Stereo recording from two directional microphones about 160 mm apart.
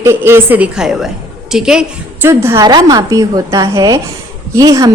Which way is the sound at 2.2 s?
15° right (ahead or behind).